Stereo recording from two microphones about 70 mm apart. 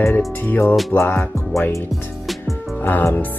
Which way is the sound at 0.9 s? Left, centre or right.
Left.